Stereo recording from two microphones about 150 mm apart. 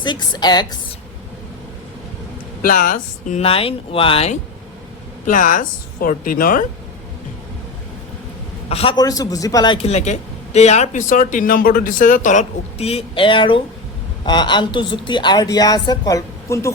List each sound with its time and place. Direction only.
0.0 s a woman's voice: 30° left (ahead or behind)
2.6 s a woman's voice: 65° left (ahead or behind)
3.4 s speech: 40° left (ahead or behind)
5.2 s a woman's voice: 60° left (ahead or behind)
8.7 s speech: 40° left (ahead or behind)
9.0 s a woman's voice: 25° left (ahead or behind)
9.7 s a woman's voice: 45° left (ahead or behind); by 16.7 s 20° left (ahead or behind)